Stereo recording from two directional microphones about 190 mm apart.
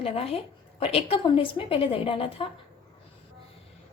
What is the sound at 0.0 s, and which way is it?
A woman's voice, 30° left (ahead or behind).